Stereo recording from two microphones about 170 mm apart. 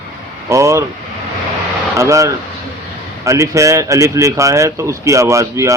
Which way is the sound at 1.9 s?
15° right (ahead or behind).